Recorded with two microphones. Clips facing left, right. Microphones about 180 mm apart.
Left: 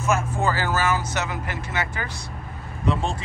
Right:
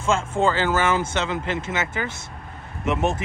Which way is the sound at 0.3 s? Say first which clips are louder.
Right 3 dB; 25° right (ahead or behind).